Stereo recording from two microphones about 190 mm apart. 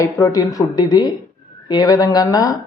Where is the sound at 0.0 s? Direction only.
15° left (ahead or behind).